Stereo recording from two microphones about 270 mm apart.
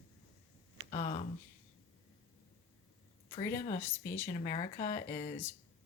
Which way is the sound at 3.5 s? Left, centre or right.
Left.